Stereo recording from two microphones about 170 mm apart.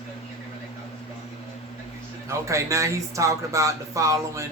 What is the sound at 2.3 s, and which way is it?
Speech, 15° right (ahead or behind).